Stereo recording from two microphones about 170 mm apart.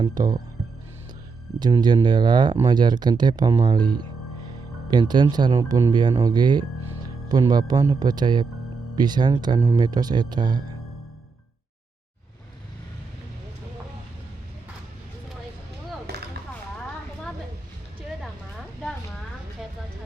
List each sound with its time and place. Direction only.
0.0 s speech: 25° right (ahead or behind)
1.5 s speech: 25° right (ahead or behind)
16.1 s a sound: 70° right (ahead or behind)